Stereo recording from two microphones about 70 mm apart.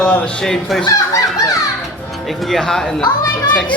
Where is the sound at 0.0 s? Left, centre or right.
Centre.